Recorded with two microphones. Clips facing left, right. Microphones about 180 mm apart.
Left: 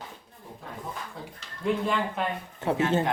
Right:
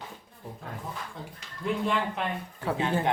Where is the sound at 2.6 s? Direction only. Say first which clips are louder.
Left 3 dB; 25° left (ahead or behind).